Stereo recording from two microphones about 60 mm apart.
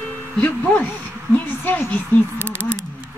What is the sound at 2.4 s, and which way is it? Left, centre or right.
Speech, right.